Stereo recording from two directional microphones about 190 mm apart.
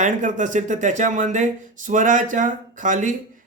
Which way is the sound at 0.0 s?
40° right (ahead or behind).